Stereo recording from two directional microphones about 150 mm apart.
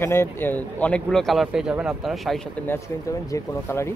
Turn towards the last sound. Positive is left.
turn(degrees=15)  # may be behind; listen again after turning